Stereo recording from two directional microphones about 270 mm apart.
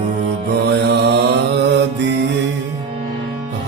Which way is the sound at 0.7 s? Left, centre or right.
Right.